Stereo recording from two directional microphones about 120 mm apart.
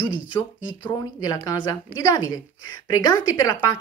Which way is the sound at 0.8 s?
35° left (ahead or behind).